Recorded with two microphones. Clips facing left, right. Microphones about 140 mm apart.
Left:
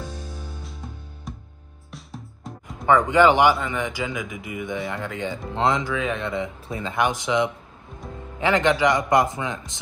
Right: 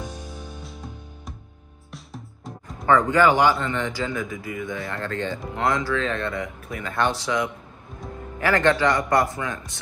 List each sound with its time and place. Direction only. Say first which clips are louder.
1.9 s music: even; centre (ahead or behind)
2.9 s speech: left 1 dB; 20° left (ahead or behind)
3.5 s a man's voice: right 1 dB; 5° left (ahead or behind)
3.8 s speech: right 1 dB; 15° left (ahead or behind)